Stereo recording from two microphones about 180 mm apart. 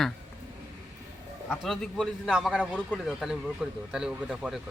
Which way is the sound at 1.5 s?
Centre (ahead or behind).